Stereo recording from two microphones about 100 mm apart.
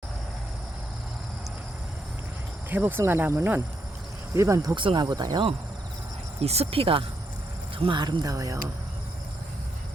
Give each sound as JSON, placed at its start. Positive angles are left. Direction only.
{"t": 2.6, "sound": "speech", "side_deg": -20}
{"t": 4.4, "sound": "speech", "side_deg": -30}
{"t": 4.7, "sound": "speech", "side_deg": -55}
{"t": 6.4, "sound": "speech", "side_deg": -90}
{"t": 7.9, "sound": "speech", "side_deg": -50}